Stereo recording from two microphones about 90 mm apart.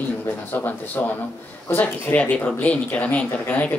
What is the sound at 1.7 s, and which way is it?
Speech, 20° left (ahead or behind).